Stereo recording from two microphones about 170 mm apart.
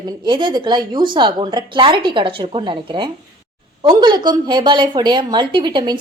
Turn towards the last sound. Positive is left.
turn(degrees=-25)  # may be behind; listen again after turning